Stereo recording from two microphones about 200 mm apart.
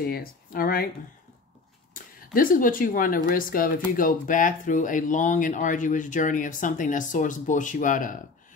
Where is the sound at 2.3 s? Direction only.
45° left (ahead or behind).